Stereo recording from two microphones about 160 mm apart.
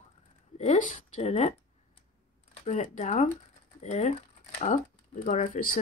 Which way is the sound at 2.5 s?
45° left (ahead or behind).